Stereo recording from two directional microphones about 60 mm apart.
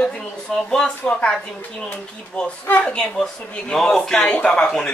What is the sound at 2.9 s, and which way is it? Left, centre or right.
Speech, centre.